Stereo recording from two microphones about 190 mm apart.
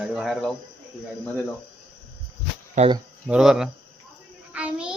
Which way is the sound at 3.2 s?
5° right (ahead or behind).